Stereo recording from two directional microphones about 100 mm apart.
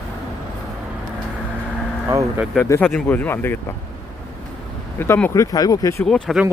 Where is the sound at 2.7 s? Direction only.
25° left (ahead or behind).